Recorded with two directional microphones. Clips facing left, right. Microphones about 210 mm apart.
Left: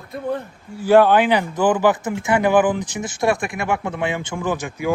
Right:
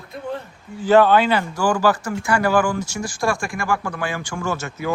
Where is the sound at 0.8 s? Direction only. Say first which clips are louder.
Left 1 dB; 10° left (ahead or behind).